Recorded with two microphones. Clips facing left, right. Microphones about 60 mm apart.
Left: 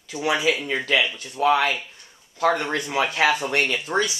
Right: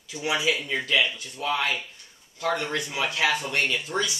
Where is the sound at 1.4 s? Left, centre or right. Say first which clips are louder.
Left 9 dB; left.